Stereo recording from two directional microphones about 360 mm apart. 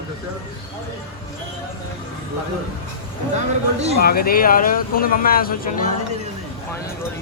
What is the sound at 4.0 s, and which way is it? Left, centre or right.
Speech, left.